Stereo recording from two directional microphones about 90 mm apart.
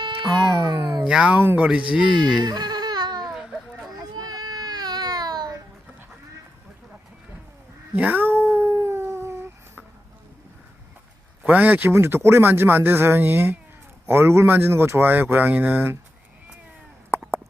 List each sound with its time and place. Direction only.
0.0 s speech: 60° right (ahead or behind)
1.0 s speech: 10° right (ahead or behind)
2.4 s baby cry: 50° right (ahead or behind)
3.3 s children playing: 5° right (ahead or behind)
4.1 s baby cry: 50° right (ahead or behind)
7.9 s cat: 20° right (ahead or behind)
11.4 s speech: 20° right (ahead or behind)
17.1 s a sound: 25° right (ahead or behind)